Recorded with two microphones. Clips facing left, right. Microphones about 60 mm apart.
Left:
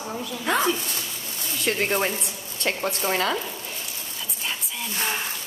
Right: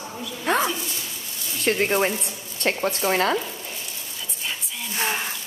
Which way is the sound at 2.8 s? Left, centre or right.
Right.